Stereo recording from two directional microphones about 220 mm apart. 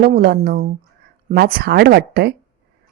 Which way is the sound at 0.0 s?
40° right (ahead or behind).